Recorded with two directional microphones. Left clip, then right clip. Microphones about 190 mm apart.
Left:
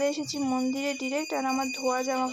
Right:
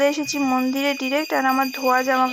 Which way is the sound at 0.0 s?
15° right (ahead or behind).